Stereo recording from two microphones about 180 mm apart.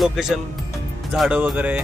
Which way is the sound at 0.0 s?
Centre (ahead or behind).